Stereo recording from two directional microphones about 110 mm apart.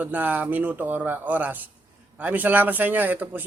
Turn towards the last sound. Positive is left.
turn(degrees=-15)  # may be behind; listen again after turning